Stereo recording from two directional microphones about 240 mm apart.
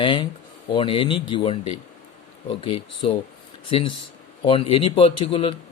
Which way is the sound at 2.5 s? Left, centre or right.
Left.